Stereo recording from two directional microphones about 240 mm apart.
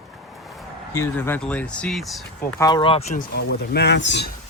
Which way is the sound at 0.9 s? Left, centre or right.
Centre.